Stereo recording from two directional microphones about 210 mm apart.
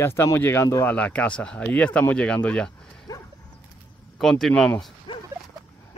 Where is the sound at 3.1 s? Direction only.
15° left (ahead or behind).